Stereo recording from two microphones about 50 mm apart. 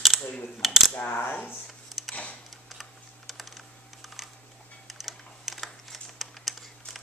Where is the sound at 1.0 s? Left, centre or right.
Left.